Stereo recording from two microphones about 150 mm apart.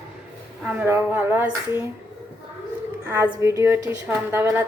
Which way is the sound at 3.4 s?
20° right (ahead or behind).